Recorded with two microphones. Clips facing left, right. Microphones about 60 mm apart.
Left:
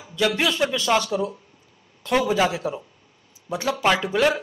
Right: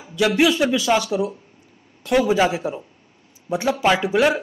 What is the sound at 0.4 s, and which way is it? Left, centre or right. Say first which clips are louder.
A man's voice: right 5 dB; centre.